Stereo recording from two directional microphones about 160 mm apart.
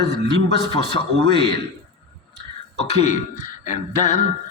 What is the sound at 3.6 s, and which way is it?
Music, 45° left (ahead or behind).